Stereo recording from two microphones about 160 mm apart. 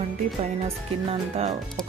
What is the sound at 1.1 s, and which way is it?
Speech, 40° right (ahead or behind).